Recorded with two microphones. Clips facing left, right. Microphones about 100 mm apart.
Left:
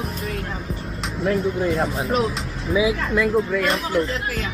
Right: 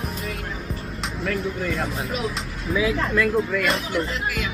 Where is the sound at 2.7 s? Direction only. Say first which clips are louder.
Left 2 dB; 15° left (ahead or behind).